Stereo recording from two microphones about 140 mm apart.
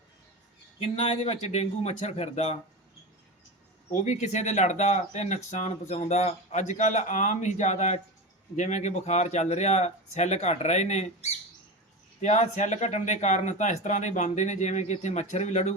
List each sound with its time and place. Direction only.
0.8 s a man's voice: 45° left (ahead or behind)
3.8 s speech: 55° left (ahead or behind)